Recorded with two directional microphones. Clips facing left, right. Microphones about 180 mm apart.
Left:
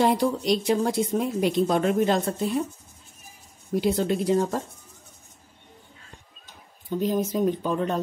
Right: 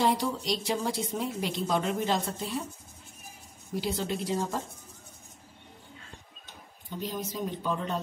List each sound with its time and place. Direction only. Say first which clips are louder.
0.0 s a woman's voice: left 6 dB; 50° left (ahead or behind)
3.8 s a woman's voice: left 8 dB; 50° left (ahead or behind)
7.0 s a woman's voice: left 10 dB; 50° left (ahead or behind)